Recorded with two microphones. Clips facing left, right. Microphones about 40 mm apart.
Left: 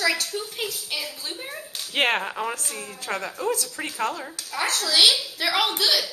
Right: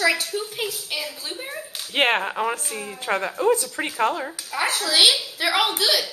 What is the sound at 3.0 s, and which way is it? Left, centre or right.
A woman's voice, right.